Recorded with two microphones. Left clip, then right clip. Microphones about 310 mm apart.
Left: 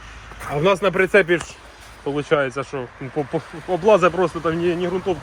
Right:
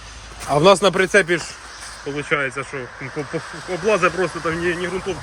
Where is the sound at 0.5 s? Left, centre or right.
Centre.